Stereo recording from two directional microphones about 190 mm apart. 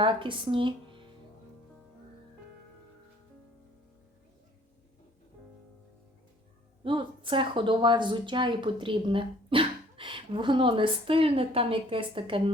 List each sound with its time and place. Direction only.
0.0 s speech: 25° right (ahead or behind)
6.8 s speech: 25° right (ahead or behind)